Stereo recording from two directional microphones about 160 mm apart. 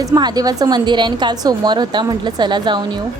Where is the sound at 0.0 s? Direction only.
25° right (ahead or behind).